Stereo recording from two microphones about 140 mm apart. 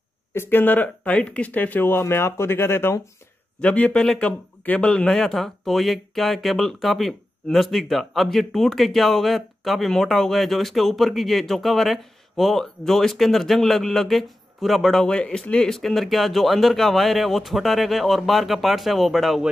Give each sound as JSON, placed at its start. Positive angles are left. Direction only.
{"t": 0.3, "sound": "speech", "side_deg": 15}